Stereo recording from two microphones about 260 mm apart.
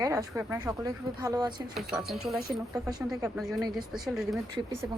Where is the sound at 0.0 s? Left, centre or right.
Centre.